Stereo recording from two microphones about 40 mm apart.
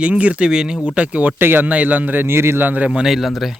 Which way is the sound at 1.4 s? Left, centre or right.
Right.